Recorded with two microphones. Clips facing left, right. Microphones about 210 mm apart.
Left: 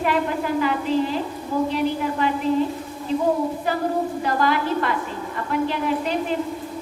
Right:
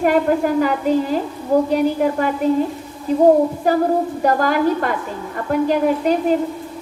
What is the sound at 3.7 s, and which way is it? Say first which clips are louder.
A woman's voice: right 5 dB; 45° right (ahead or behind).